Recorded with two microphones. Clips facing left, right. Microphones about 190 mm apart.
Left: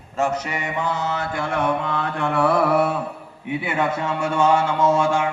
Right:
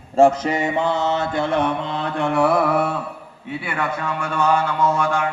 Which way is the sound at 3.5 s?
20° left (ahead or behind).